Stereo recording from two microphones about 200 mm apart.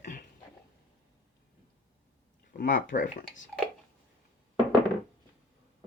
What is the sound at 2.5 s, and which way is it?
Speech, 45° left (ahead or behind).